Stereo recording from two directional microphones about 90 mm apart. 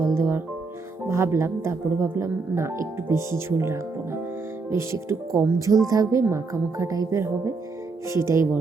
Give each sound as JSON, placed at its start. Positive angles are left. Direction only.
{"t": 0.0, "sound": "music", "side_deg": -30}
{"t": 1.0, "sound": "speech", "side_deg": -30}
{"t": 5.5, "sound": "speech", "side_deg": -40}